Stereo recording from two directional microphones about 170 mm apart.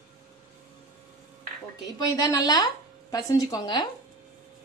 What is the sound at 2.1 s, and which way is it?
A woman's voice, 20° left (ahead or behind).